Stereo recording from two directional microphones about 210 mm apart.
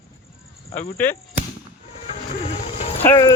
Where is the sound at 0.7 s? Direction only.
10° left (ahead or behind).